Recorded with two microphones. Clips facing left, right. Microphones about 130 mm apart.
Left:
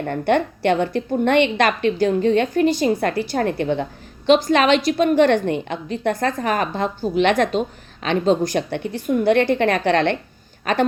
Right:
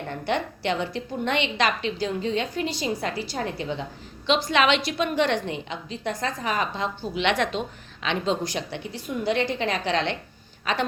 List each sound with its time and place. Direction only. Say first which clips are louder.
0.1 s a woman's voice: left 8 dB; 55° left (ahead or behind)
4.3 s a woman's voice: left 7 dB; 45° left (ahead or behind)